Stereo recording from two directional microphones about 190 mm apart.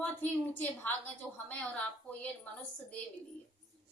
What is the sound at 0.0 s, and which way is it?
A woman's voice, 10° left (ahead or behind).